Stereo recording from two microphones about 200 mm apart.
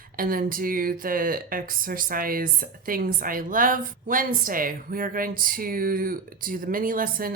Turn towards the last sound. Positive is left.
turn(degrees=-45)  # may be behind; listen again after turning